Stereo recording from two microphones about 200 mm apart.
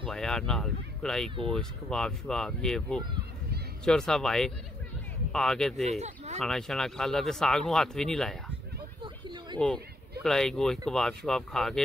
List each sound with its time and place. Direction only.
0.1 s speech: 5° left (ahead or behind)
5.9 s speech: 35° right (ahead or behind)
6.4 s speech: centre (ahead or behind)
9.0 s a sound: 25° right (ahead or behind)
10.2 s speech: centre (ahead or behind)